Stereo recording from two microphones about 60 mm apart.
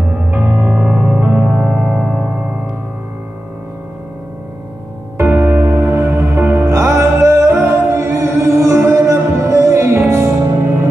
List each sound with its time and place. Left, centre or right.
0.3 s music: right
1.7 s music: centre
5.4 s music: right
6.6 s music: right